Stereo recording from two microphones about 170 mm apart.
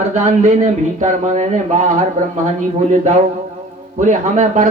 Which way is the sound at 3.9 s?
45° right (ahead or behind).